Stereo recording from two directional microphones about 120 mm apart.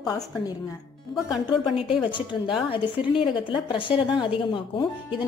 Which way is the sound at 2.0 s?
40° left (ahead or behind).